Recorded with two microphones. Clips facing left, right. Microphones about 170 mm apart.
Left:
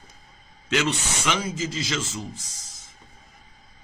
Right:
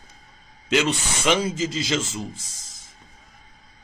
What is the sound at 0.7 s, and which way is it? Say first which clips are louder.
Speech: right 3 dB; 25° right (ahead or behind).